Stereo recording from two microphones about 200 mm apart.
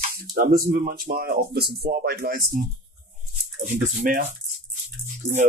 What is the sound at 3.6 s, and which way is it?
Speech, 40° right (ahead or behind).